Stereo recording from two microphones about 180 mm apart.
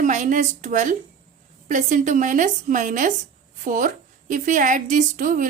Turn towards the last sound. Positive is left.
turn(degrees=-50)  # may be behind; listen again after turning